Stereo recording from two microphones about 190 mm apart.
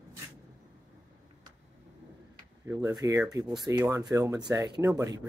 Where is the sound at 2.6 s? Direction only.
15° right (ahead or behind).